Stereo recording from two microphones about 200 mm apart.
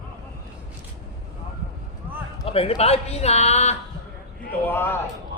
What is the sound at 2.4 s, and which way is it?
A man's voice, 30° left (ahead or behind).